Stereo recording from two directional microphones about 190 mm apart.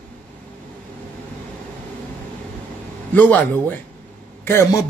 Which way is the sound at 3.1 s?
10° left (ahead or behind).